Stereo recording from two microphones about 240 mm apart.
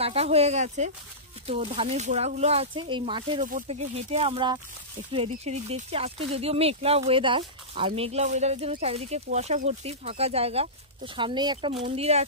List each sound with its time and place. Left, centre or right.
0.0 s speech: right